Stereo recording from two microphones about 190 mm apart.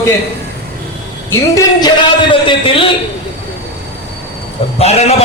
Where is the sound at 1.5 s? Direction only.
20° left (ahead or behind).